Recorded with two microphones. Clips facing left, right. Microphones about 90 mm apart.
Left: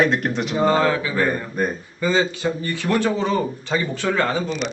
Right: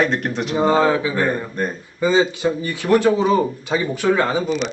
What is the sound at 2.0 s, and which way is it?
Speech, 20° right (ahead or behind).